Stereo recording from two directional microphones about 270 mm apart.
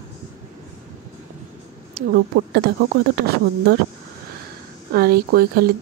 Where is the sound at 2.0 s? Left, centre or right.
Right.